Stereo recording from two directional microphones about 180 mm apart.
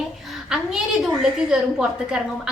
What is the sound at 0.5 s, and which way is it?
A woman's voice, 5° right (ahead or behind).